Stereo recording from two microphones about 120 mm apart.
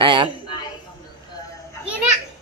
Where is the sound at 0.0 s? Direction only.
45° right (ahead or behind).